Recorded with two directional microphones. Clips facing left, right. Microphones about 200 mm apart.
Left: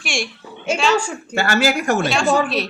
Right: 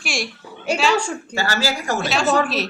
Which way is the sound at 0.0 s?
Centre (ahead or behind).